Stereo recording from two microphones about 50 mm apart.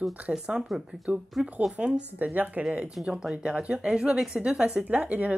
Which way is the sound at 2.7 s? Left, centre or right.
Right.